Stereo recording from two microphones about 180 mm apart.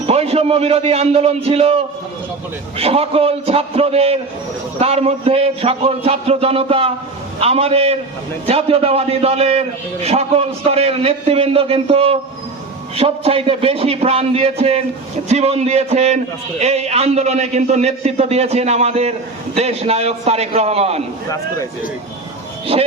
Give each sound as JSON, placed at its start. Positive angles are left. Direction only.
{"t": 0.1, "sound": "a man's voice", "side_deg": -35}
{"t": 21.2, "sound": "speech", "side_deg": 20}